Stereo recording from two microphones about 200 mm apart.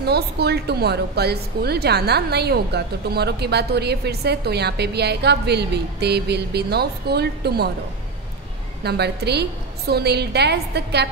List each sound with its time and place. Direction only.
0.0 s a woman's voice: 55° right (ahead or behind)
8.8 s a woman's voice: 55° right (ahead or behind)